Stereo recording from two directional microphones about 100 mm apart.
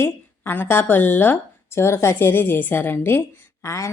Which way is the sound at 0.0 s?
20° left (ahead or behind).